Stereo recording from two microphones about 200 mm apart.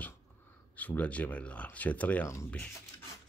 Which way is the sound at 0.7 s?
5° left (ahead or behind).